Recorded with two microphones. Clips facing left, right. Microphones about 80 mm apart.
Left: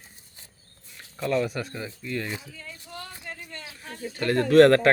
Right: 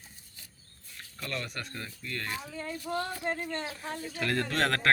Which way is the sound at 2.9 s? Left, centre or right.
Right.